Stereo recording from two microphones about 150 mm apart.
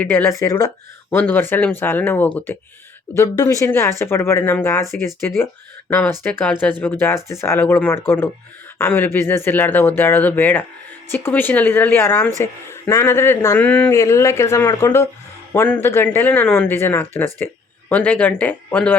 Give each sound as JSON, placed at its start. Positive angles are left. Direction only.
{"t": 0.0, "sound": "speech", "side_deg": 15}
{"t": 5.9, "sound": "speech", "side_deg": 15}